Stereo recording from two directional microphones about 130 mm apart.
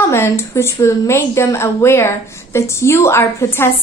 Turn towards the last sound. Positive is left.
turn(degrees=20)  # may be behind; listen again after turning